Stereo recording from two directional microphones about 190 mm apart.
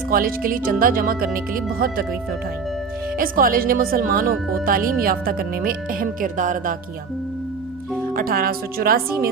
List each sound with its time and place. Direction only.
0.1 s speech: 50° right (ahead or behind)
3.2 s speech: 50° right (ahead or behind)
8.1 s speech: 50° right (ahead or behind)